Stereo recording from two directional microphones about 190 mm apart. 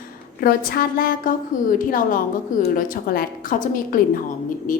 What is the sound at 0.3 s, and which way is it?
Speech, 50° left (ahead or behind).